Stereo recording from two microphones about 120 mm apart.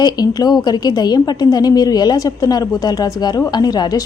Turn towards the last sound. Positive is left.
turn(degrees=35)  # may be behind; listen again after turning